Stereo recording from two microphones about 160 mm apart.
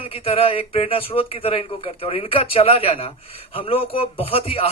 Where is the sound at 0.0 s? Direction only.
35° left (ahead or behind).